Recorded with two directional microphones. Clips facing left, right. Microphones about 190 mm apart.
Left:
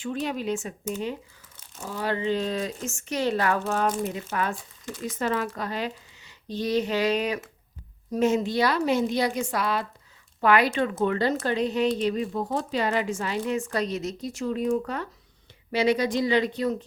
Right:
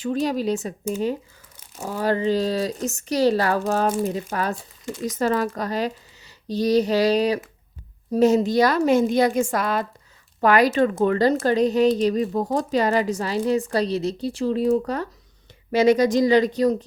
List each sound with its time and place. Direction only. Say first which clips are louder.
0.0 s a woman's voice: right 6 dB; 35° right (ahead or behind)